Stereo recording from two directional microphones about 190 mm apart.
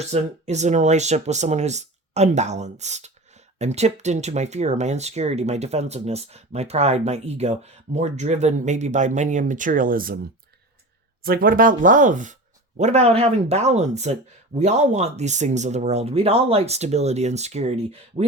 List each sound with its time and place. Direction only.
0.0 s speech: 35° right (ahead or behind)
11.2 s speech: 50° right (ahead or behind); by 18.3 s 35° right (ahead or behind)